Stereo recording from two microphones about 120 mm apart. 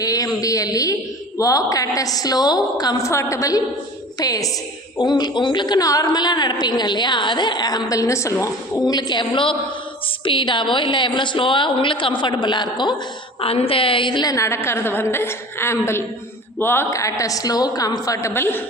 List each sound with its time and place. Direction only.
0.0 s a sound: 30° left (ahead or behind)
1.4 s a woman's voice: 30° left (ahead or behind)
13.4 s a woman's voice: 50° left (ahead or behind); by 18.6 s 20° left (ahead or behind)